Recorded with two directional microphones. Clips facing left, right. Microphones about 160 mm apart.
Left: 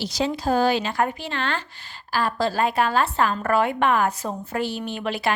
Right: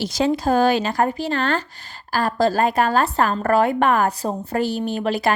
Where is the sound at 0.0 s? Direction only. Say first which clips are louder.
Right 5 dB; 50° right (ahead or behind).